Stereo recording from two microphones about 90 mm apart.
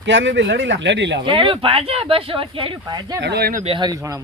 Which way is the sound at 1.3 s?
70° right (ahead or behind).